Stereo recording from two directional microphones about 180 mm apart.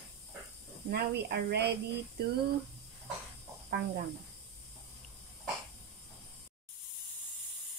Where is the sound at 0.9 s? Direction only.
65° right (ahead or behind).